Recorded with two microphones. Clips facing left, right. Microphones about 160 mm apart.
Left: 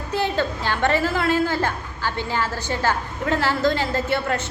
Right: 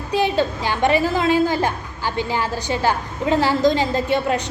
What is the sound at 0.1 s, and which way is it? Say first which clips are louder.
A woman's voice: right 4 dB; 15° right (ahead or behind).